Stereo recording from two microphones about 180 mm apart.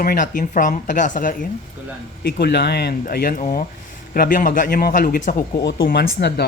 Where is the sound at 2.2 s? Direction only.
65° left (ahead or behind); by 5.4 s 45° left (ahead or behind).